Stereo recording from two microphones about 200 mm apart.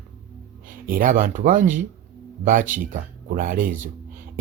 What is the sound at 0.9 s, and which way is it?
Speech, 45° right (ahead or behind).